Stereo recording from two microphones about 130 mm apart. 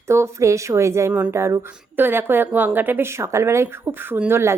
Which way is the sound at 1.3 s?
20° right (ahead or behind).